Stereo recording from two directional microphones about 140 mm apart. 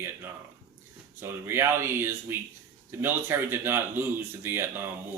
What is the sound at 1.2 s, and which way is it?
Speech, 15° right (ahead or behind).